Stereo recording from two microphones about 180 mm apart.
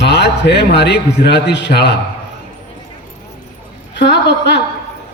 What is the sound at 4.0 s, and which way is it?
Speech, 70° left (ahead or behind).